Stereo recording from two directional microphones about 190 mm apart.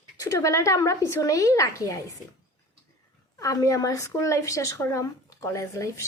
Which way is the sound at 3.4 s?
15° left (ahead or behind).